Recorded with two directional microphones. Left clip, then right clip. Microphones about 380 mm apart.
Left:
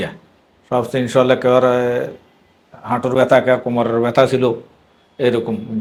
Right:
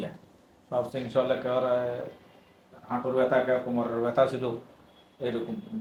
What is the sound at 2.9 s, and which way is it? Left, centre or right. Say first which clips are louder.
Speech: left 12 dB; left.